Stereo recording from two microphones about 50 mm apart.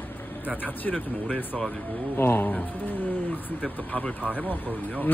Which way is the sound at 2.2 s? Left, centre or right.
Left.